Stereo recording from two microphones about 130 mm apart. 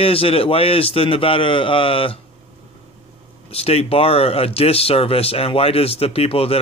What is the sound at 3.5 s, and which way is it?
Speech, 50° left (ahead or behind).